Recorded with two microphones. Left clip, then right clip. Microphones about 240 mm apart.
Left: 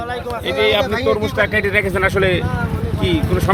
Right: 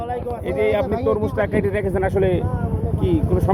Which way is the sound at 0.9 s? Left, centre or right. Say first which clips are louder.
Left 3 dB; left.